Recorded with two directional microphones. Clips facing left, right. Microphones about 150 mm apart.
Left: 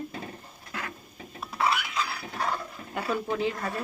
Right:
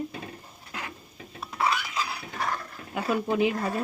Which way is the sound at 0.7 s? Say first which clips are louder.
Left 1 dB; 20° right (ahead or behind).